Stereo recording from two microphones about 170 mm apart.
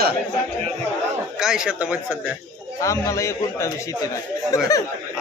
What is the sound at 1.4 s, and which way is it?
Speech, 5° right (ahead or behind).